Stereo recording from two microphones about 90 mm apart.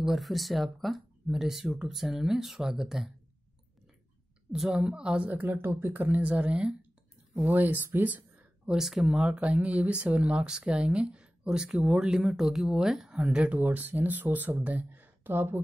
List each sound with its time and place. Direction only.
0.0 s speech: centre (ahead or behind)
4.5 s speech: 5° right (ahead or behind)
8.7 s speech: 5° right (ahead or behind); by 15.6 s 25° right (ahead or behind)